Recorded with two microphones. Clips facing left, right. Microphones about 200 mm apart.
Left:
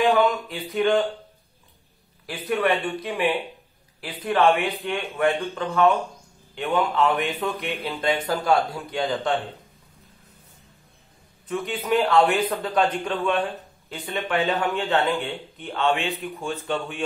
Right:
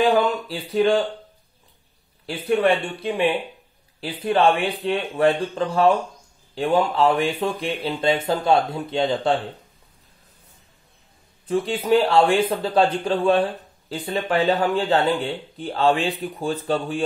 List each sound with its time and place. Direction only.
0.0 s a man's voice: 30° right (ahead or behind)
2.5 s a man's voice: 30° right (ahead or behind)
11.4 s a man's voice: 30° right (ahead or behind)